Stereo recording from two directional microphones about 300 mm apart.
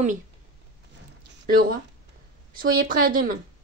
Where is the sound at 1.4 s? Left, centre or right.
Right.